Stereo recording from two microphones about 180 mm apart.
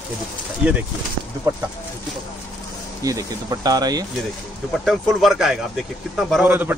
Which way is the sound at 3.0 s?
20° right (ahead or behind).